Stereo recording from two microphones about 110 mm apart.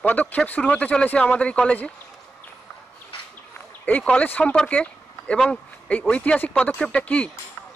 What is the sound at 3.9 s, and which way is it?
Speech, 10° left (ahead or behind).